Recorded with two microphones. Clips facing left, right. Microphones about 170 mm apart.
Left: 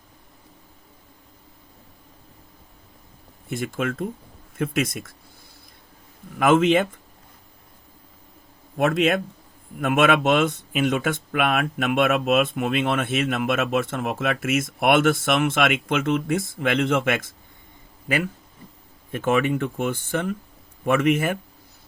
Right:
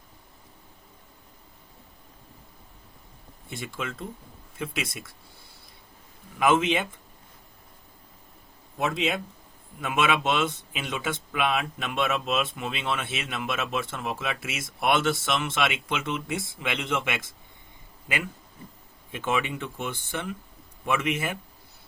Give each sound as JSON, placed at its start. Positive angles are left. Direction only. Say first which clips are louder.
{"t": 3.5, "sound": "speech", "louder": "left 9 dB", "side_deg": 50}
{"t": 6.4, "sound": "speech", "louder": "left 6 dB", "side_deg": 50}
{"t": 8.8, "sound": "speech", "louder": "left 7 dB", "side_deg": 55}
{"t": 19.1, "sound": "speech", "louder": "left 7 dB", "side_deg": 45}